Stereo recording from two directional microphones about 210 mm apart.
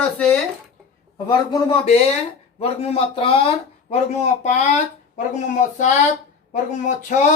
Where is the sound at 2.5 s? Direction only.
30° left (ahead or behind).